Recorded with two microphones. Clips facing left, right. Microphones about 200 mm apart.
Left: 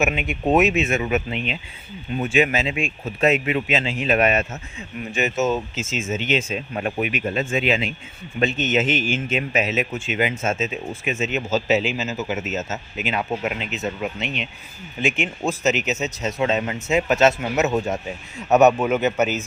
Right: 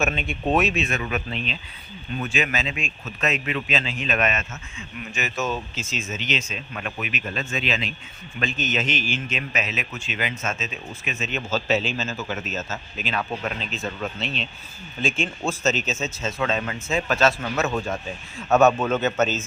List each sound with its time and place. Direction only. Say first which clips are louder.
0.0 s a man's voice: left 3 dB; 15° left (ahead or behind)